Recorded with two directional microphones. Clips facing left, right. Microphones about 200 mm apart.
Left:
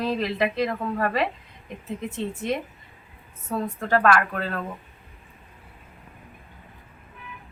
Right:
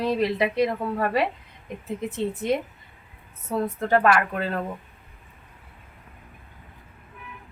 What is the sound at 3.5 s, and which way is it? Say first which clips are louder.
Speech: right 2 dB; 15° right (ahead or behind).